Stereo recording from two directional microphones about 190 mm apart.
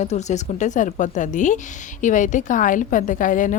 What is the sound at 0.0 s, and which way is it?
A woman's voice, 40° left (ahead or behind).